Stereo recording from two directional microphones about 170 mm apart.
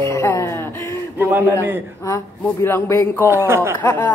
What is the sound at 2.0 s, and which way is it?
Speech, 15° left (ahead or behind).